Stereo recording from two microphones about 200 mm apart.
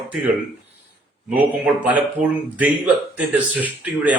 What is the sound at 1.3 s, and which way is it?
A man's voice, 10° right (ahead or behind).